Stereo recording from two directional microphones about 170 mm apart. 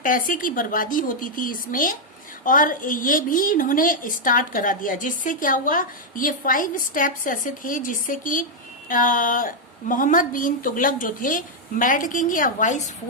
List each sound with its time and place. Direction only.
0.0 s a woman's voice: 55° left (ahead or behind)